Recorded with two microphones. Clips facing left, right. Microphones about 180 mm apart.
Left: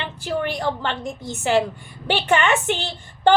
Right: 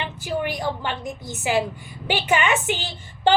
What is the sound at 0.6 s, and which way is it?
Speech, 10° right (ahead or behind).